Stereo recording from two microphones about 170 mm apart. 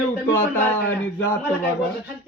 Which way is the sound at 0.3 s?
10° left (ahead or behind).